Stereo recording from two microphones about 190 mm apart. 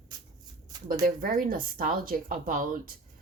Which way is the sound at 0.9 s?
45° right (ahead or behind).